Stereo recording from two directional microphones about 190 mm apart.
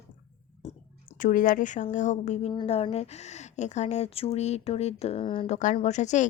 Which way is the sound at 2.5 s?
25° left (ahead or behind).